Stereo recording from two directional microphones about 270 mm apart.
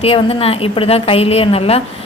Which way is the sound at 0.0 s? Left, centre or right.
Left.